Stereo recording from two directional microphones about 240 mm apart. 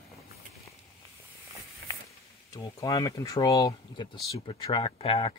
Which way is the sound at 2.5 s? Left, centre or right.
Centre.